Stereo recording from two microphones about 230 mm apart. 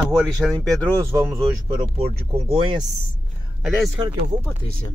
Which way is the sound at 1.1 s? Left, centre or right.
Centre.